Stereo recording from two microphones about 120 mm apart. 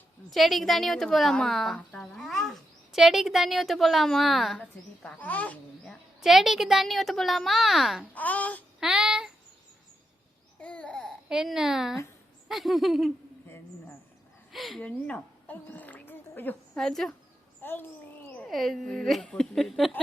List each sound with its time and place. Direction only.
0.3 s a woman's voice: centre (ahead or behind)
5.0 s speech: 10° left (ahead or behind)
8.1 s speech: 15° left (ahead or behind)
8.8 s child singing: 5° right (ahead or behind)
10.6 s babbling: 10° left (ahead or behind)
11.3 s a woman's voice: 5° right (ahead or behind)
14.5 s speech: centre (ahead or behind); by 16.6 s 15° left (ahead or behind)
16.7 s a woman's voice: 5° left (ahead or behind)
17.6 s a child's voice: 15° left (ahead or behind)
18.4 s a woman's voice: centre (ahead or behind)